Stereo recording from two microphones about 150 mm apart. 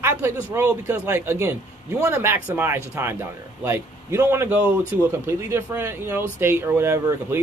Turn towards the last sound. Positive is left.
turn(degrees=-20)  # may be behind; listen again after turning